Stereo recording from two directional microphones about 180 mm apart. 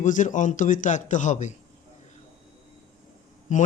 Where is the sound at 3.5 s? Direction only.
45° left (ahead or behind).